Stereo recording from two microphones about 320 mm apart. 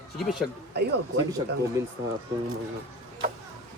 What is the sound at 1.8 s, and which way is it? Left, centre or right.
Speech, centre.